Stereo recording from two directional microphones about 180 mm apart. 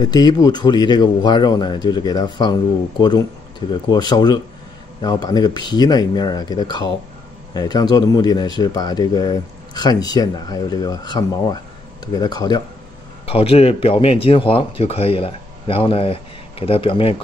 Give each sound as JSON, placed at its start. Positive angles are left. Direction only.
{"t": 0.0, "sound": "speech", "side_deg": 20}
{"t": 13.2, "sound": "a man's voice", "side_deg": 30}